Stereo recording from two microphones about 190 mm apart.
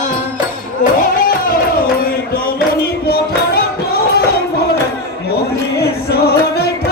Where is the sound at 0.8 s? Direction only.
45° left (ahead or behind).